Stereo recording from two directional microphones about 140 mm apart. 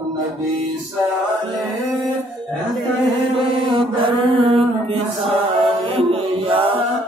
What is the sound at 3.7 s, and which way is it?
Mantra, 40° right (ahead or behind).